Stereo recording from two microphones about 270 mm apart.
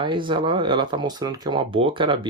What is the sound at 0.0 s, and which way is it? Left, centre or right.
Speech, centre.